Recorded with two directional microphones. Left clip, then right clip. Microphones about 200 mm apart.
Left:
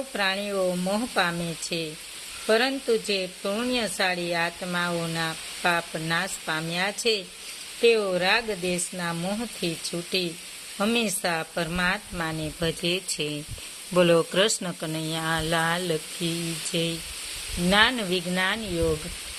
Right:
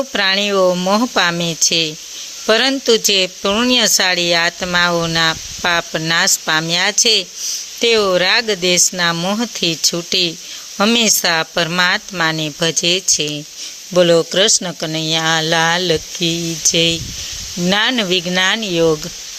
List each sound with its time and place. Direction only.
0.1 s speech: 40° right (ahead or behind)
17.7 s speech: 30° right (ahead or behind)